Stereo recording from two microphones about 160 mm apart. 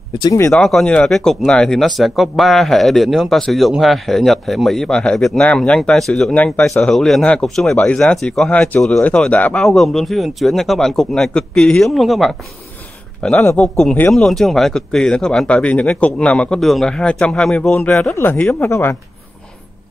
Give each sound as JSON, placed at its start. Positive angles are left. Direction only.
{"t": 0.2, "sound": "speech", "side_deg": 20}
{"t": 0.5, "sound": "speech", "side_deg": 0}